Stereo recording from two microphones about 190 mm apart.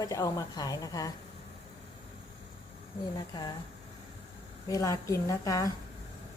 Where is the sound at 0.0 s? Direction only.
20° left (ahead or behind).